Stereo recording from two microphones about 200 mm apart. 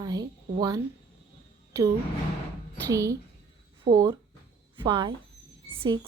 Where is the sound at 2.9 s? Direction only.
15° right (ahead or behind).